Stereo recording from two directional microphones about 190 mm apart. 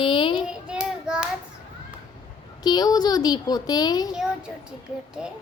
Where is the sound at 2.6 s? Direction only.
20° left (ahead or behind).